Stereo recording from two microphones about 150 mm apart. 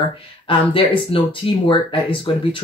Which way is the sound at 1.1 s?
35° left (ahead or behind).